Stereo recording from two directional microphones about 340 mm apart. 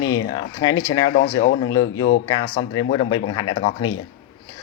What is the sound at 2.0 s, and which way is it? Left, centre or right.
Speech, left.